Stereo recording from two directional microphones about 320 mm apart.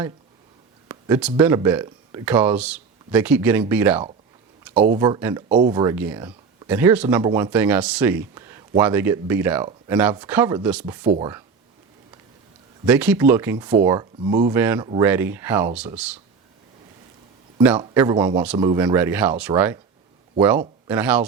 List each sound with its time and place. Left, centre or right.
0.9 s a sound: centre
1.4 s speech: centre
11.0 s speech: right
12.8 s speech: centre
17.6 s speech: centre
20.8 s speech: centre